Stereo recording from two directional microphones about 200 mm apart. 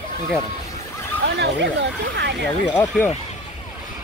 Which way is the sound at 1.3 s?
60° right (ahead or behind).